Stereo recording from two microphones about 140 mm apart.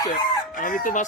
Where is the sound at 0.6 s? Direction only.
80° left.